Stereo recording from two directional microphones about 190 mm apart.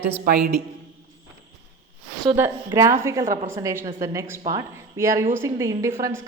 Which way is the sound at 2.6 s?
15° right (ahead or behind).